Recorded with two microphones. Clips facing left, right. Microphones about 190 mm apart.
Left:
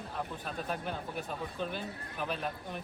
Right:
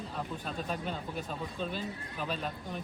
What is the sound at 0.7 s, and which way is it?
Speech, 10° left (ahead or behind).